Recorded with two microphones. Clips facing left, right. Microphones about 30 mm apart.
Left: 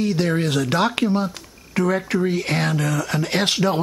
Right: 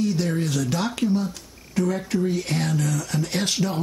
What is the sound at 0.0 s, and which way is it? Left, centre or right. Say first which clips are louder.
Speech: left 3 dB; left.